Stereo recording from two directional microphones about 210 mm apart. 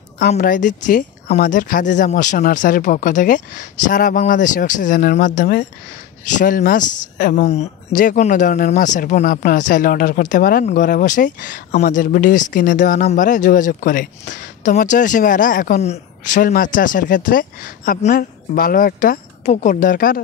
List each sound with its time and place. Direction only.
0.4 s speech: 40° left (ahead or behind)